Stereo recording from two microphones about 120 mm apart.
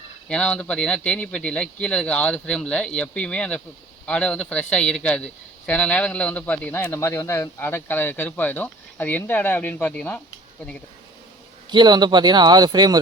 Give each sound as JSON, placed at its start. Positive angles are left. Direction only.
{"t": 0.3, "sound": "a man's voice", "side_deg": 10}
{"t": 11.7, "sound": "speech", "side_deg": -40}